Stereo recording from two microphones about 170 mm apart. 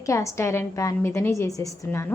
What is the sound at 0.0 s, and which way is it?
Speech, 20° left (ahead or behind).